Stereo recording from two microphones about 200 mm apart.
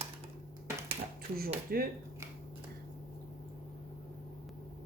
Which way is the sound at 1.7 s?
50° right (ahead or behind).